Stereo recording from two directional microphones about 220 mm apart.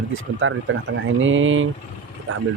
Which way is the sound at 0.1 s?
60° right (ahead or behind).